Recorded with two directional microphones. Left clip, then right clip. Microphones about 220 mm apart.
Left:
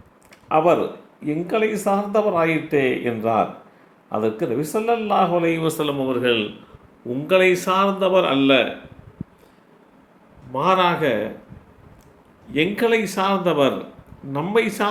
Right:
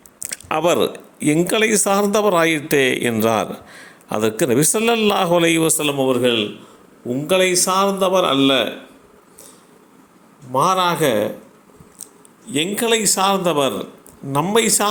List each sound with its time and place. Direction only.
0.2 s a sound: 45° right (ahead or behind)
1.2 s a man's voice: 40° right (ahead or behind)
10.5 s a man's voice: 30° right (ahead or behind)
12.5 s a man's voice: 35° right (ahead or behind)